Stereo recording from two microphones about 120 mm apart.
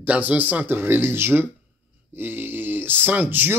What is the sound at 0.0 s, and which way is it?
Speech, 15° right (ahead or behind).